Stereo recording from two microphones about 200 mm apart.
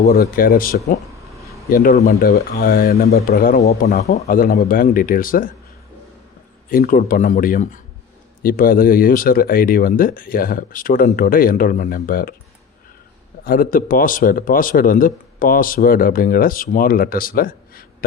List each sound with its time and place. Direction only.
0.2 s speech: 45° left (ahead or behind)
6.7 s speech: 45° left (ahead or behind)
13.4 s speech: 45° left (ahead or behind)